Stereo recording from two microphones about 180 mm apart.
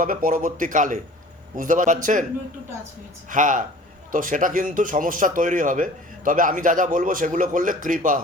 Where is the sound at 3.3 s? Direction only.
45° right (ahead or behind).